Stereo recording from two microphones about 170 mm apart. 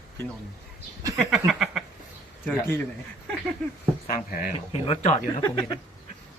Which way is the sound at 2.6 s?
15° left (ahead or behind).